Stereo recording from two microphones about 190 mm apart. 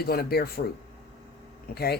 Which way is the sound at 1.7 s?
55° left (ahead or behind).